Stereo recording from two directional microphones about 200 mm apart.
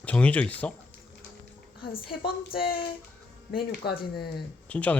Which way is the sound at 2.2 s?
50° left (ahead or behind).